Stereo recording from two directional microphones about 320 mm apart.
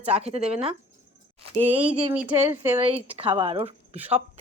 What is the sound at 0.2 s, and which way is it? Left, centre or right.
Speech, centre.